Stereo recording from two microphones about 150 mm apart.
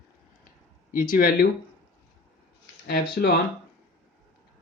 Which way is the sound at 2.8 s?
90° left.